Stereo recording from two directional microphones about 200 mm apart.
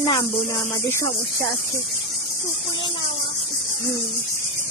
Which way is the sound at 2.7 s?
25° left (ahead or behind).